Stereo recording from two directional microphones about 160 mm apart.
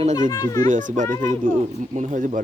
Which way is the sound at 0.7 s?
55° right (ahead or behind).